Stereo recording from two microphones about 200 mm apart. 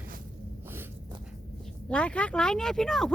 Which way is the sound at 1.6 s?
5° left (ahead or behind).